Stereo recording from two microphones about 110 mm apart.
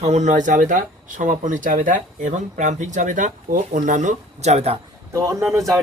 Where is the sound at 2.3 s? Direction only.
90° right; by 4.7 s 75° right (ahead or behind).